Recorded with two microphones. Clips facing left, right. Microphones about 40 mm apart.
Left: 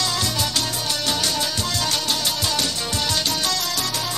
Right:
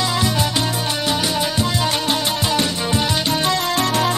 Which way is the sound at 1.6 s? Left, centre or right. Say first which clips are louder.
Right 5 dB; right.